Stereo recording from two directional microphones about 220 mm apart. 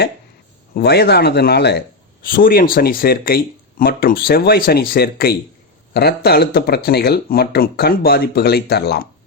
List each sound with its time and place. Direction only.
0.7 s speech: 50° left (ahead or behind)